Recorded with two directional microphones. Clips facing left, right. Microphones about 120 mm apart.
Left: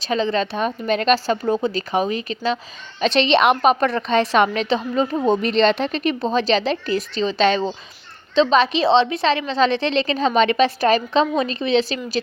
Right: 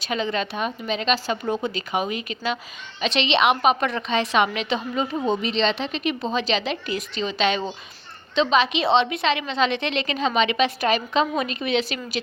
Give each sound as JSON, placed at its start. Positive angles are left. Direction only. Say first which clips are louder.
{"t": 0.0, "sound": "a woman's voice", "louder": "left 5 dB", "side_deg": 35}
{"t": 0.9, "sound": "a woman's voice", "louder": "left 7 dB", "side_deg": 45}